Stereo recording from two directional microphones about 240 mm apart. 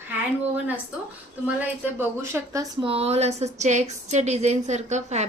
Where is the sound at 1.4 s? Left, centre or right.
Centre.